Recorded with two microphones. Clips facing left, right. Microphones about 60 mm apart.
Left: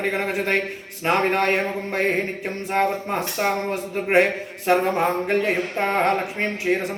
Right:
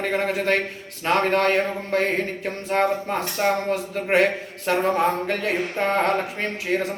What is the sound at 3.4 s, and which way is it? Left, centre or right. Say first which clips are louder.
Speech: right 2 dB; centre.